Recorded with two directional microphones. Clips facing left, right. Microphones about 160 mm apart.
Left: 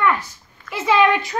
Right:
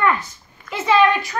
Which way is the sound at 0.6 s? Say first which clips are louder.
Right 2 dB; 15° right (ahead or behind).